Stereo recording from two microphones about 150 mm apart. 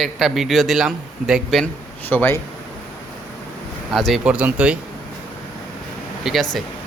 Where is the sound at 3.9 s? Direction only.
Centre (ahead or behind).